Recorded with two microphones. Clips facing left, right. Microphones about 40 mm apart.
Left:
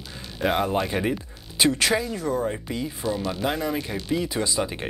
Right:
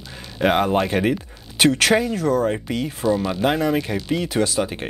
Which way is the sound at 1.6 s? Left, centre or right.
Right.